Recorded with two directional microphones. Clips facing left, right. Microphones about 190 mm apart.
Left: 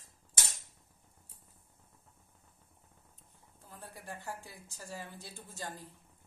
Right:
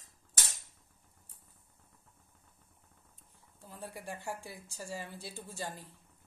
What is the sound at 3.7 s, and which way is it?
A woman's voice, 10° right (ahead or behind).